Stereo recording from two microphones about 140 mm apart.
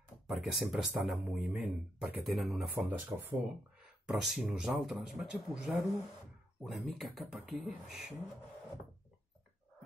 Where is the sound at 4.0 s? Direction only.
5° right (ahead or behind).